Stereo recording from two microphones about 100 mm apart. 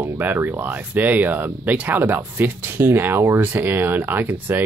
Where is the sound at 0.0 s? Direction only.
20° right (ahead or behind).